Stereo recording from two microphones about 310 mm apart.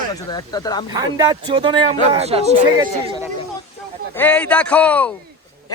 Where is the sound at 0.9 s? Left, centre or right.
Centre.